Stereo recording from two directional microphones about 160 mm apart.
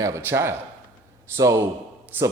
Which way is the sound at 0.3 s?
15° right (ahead or behind).